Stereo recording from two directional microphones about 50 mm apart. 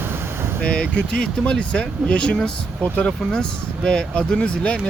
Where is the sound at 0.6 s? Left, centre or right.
Centre.